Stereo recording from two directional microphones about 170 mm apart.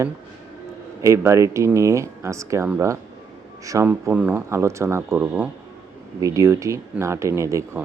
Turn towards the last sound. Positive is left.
turn(degrees=-15)  # may be behind; listen again after turning